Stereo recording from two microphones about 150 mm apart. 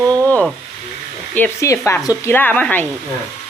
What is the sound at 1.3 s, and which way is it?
Speech, 15° left (ahead or behind).